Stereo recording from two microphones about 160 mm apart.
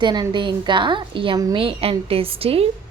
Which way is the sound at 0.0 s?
30° right (ahead or behind).